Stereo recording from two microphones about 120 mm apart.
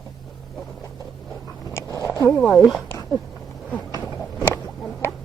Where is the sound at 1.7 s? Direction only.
25° left (ahead or behind).